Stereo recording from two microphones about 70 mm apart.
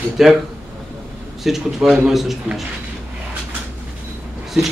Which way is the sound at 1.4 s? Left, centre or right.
Centre.